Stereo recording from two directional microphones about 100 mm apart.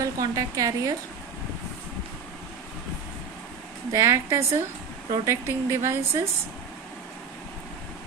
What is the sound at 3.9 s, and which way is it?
Speech, 30° right (ahead or behind).